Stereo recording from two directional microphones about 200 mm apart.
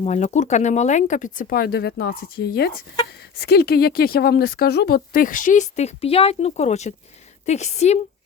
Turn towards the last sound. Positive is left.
turn(degrees=35)  # may be behind; listen again after turning